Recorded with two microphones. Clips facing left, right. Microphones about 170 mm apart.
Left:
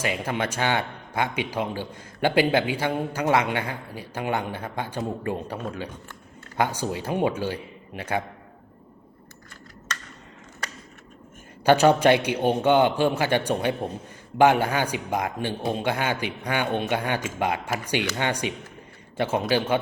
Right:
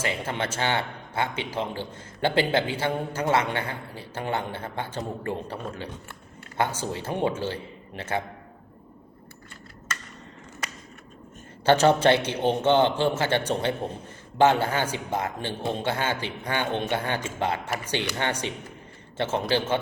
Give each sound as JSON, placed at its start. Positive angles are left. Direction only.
{"t": 0.0, "sound": "a man's voice", "side_deg": 15}
{"t": 6.6, "sound": "a man's voice", "side_deg": 15}
{"t": 11.6, "sound": "a man's voice", "side_deg": 15}